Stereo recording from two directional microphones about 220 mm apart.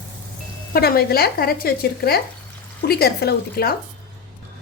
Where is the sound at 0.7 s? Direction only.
45° left (ahead or behind).